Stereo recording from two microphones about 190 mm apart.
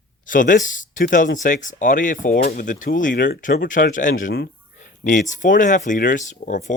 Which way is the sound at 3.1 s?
60° left (ahead or behind).